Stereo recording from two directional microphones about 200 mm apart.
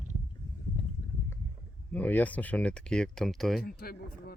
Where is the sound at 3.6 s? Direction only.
50° left (ahead or behind).